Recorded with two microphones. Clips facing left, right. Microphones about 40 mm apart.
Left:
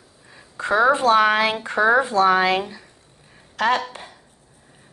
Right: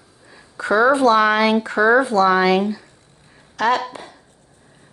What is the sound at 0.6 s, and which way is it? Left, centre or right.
A woman's voice, left.